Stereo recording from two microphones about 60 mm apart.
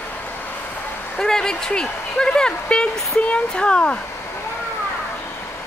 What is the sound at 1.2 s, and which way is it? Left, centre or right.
Speech, centre.